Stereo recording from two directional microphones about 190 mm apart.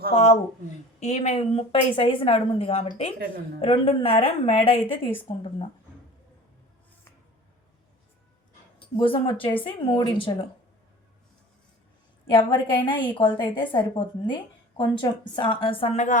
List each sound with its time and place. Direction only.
0.1 s a woman's voice: 35° left (ahead or behind)
9.0 s a woman's voice: 25° left (ahead or behind)
12.5 s a woman's voice: 25° left (ahead or behind)